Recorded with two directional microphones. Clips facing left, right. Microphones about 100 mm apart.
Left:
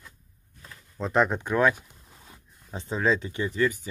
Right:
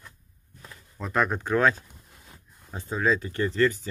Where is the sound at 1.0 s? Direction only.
25° left (ahead or behind).